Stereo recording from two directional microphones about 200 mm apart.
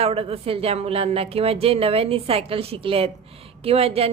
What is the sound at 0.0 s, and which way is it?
A woman's voice, 30° right (ahead or behind).